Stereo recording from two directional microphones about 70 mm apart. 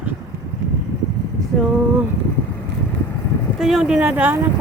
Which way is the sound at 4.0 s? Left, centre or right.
Right.